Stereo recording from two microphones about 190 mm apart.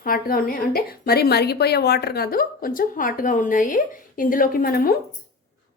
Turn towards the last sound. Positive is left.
turn(degrees=50)  # may be behind; listen again after turning